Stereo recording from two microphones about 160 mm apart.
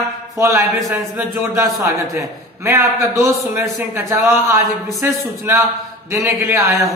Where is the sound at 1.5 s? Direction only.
20° right (ahead or behind).